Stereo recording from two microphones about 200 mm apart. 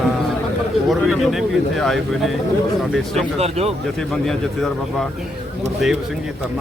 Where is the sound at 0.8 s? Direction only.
Centre (ahead or behind).